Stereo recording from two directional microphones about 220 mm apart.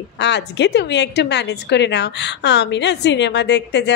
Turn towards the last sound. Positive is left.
turn(degrees=50)  # may be behind; listen again after turning